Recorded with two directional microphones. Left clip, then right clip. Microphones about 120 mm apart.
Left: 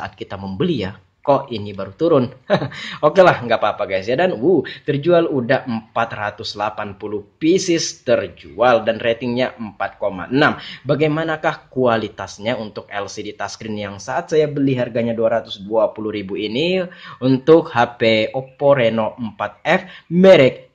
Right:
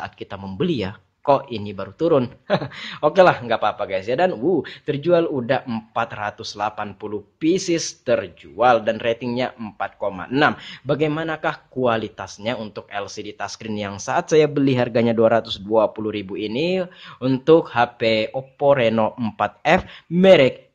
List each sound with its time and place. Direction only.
0.0 s speech: 10° right (ahead or behind); by 15.9 s 35° right (ahead or behind)
16.0 s speech: 15° right (ahead or behind)
18.7 s speech: 20° right (ahead or behind)
20.2 s speech: 10° right (ahead or behind)